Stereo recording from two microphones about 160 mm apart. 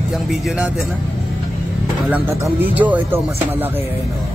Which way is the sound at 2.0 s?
10° right (ahead or behind).